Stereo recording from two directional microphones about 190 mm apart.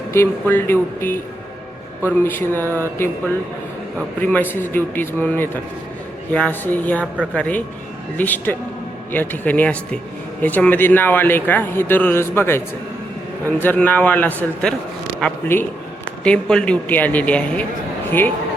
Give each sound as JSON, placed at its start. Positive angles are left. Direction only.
{"t": 0.1, "sound": "a man's voice", "side_deg": 10}
{"t": 2.2, "sound": "a man's voice", "side_deg": 10}
{"t": 2.6, "sound": "speech", "side_deg": -15}
{"t": 4.2, "sound": "a man's voice", "side_deg": 10}